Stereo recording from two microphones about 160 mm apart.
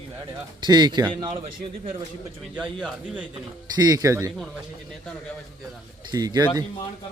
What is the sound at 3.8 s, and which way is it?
Speech, 20° right (ahead or behind).